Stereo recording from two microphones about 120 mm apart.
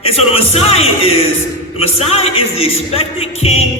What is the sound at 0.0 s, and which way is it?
Music, 55° left (ahead or behind).